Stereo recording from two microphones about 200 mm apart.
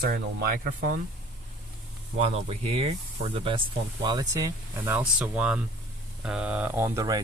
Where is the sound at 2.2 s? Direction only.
30° right (ahead or behind).